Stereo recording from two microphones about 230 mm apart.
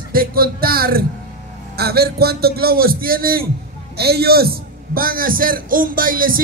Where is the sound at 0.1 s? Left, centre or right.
Right.